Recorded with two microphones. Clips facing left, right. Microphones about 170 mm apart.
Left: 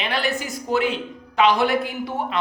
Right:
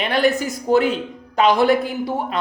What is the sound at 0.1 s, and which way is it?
A man's voice, 40° right (ahead or behind).